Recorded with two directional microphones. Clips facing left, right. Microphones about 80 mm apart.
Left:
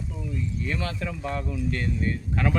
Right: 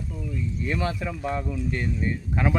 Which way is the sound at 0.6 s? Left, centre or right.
Right.